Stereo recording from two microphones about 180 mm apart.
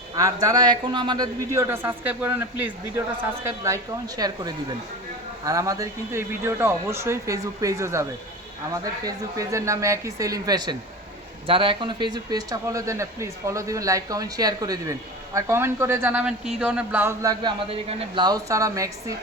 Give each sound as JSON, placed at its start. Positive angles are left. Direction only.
{"t": 0.2, "sound": "speech", "side_deg": -20}
{"t": 17.4, "sound": "speech", "side_deg": -30}